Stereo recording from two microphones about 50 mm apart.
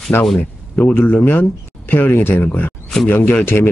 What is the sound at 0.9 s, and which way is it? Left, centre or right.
Speech, left.